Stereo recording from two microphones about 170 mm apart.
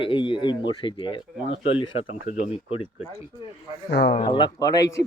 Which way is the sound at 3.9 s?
70° left (ahead or behind).